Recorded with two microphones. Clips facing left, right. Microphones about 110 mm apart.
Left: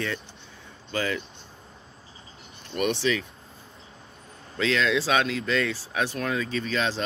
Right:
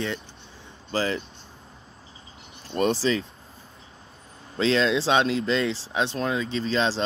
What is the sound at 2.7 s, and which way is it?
Speech, 30° right (ahead or behind).